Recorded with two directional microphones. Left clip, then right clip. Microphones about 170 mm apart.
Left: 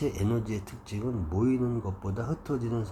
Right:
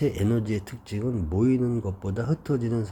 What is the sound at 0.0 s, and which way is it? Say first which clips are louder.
Speech: right 4 dB; 25° right (ahead or behind).